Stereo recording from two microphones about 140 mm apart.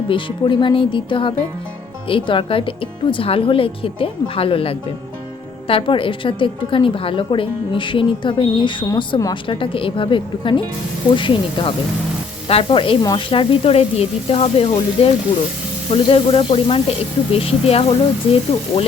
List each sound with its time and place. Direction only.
0.1 s a woman's voice: 35° left (ahead or behind)